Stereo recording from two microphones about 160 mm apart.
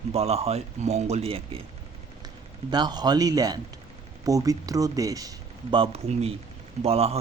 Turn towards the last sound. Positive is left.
turn(degrees=-40)  # may be behind; listen again after turning